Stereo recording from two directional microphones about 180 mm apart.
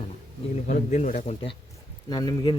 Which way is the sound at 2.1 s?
25° left (ahead or behind).